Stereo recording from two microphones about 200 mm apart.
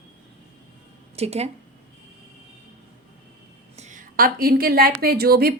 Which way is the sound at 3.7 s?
40° right (ahead or behind).